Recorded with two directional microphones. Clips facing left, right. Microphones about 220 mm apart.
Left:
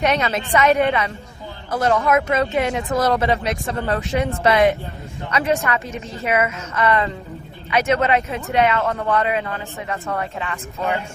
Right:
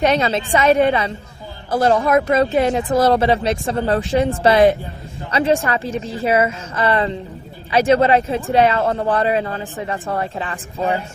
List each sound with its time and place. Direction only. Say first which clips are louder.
0.0 s speech: right 3 dB; 30° right (ahead or behind)